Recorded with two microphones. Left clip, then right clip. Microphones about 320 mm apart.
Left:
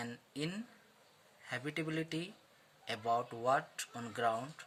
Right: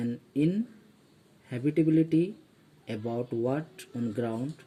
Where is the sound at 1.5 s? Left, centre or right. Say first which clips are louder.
Right 13 dB; centre.